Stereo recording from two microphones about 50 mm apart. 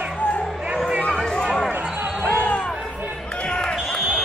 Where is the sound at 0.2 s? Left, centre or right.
Left.